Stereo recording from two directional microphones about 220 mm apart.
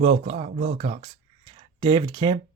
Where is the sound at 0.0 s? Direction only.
25° right (ahead or behind).